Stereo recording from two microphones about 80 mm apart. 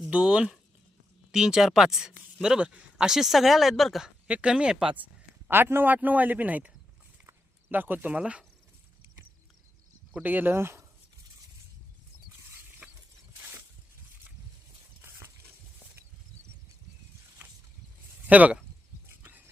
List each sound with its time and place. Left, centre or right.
0.1 s speech: centre
4.0 s speech: centre
5.5 s a man's voice: right
10.2 s a man's voice: right
18.3 s speech: centre
19.0 s a sound: right